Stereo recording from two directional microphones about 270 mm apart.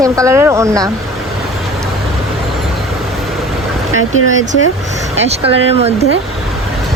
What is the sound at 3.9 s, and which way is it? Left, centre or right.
Speech, right.